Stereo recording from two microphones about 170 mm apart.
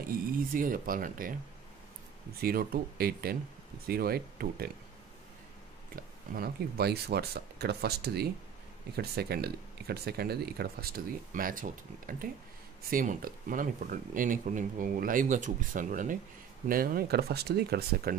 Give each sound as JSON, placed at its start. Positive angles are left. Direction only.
{"t": 0.0, "sound": "speech", "side_deg": -55}
{"t": 2.4, "sound": "speech", "side_deg": -60}
{"t": 6.3, "sound": "speech", "side_deg": -65}
{"t": 12.9, "sound": "speech", "side_deg": -55}